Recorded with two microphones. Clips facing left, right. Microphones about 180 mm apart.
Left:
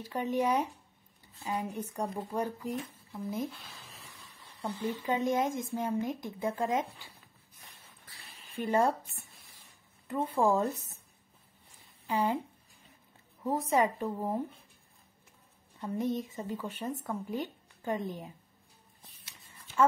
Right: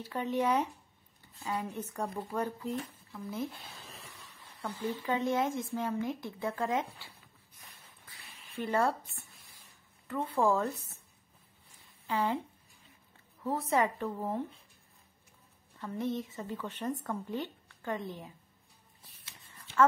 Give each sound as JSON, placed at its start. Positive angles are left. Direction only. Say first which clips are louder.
{"t": 0.0, "sound": "speech", "louder": "left 1 dB", "side_deg": 15}
{"t": 5.0, "sound": "speech", "louder": "left 1 dB", "side_deg": 15}
{"t": 8.5, "sound": "speech", "louder": "left 2 dB", "side_deg": 15}
{"t": 10.0, "sound": "a woman's voice", "louder": "left 1 dB", "side_deg": 20}
{"t": 12.1, "sound": "speech", "louder": "left 1 dB", "side_deg": 15}
{"t": 13.4, "sound": "speech", "louder": "left 2 dB", "side_deg": 15}
{"t": 15.8, "sound": "a woman's voice", "louder": "left 2 dB", "side_deg": 15}